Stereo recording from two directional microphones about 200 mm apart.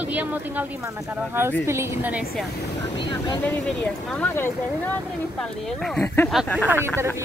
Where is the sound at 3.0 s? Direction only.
20° left (ahead or behind).